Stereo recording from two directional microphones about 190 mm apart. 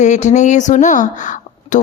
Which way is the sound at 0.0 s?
40° left (ahead or behind).